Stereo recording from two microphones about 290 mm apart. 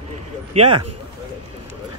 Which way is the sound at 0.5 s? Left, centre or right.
Right.